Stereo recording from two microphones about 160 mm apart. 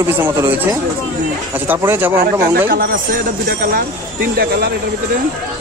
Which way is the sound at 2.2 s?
65° right (ahead or behind).